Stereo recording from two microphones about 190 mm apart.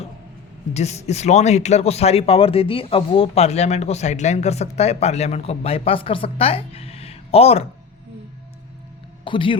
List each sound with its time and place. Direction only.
0.7 s speech: 35° left (ahead or behind)
9.2 s a man's voice: 25° left (ahead or behind)